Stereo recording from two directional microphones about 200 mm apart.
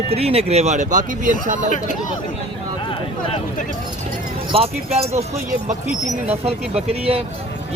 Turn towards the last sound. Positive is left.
turn(degrees=-30)  # may be behind; listen again after turning